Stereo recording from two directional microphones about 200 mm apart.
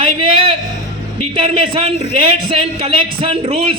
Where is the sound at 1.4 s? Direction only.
30° right (ahead or behind).